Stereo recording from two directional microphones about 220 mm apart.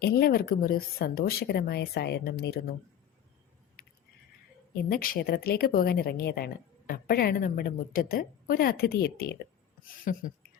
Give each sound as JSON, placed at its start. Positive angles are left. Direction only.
{"t": 0.0, "sound": "a woman's voice", "side_deg": 45}
{"t": 3.8, "sound": "keys jangling", "side_deg": 45}
{"t": 4.7, "sound": "a woman's voice", "side_deg": 40}